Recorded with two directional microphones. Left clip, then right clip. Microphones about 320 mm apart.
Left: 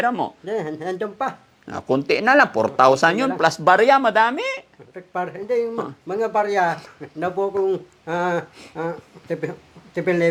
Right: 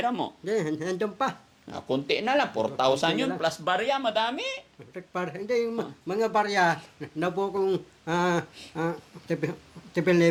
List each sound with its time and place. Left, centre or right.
0.0 s speech: centre
0.4 s speech: centre
1.6 s speech: left
3.4 s speech: left
3.8 s speech: left
4.1 s speech: left
4.9 s speech: right